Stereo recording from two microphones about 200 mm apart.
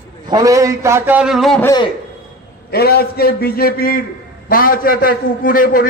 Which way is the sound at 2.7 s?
50° left (ahead or behind).